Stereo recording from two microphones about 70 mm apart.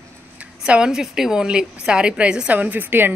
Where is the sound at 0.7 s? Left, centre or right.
Centre.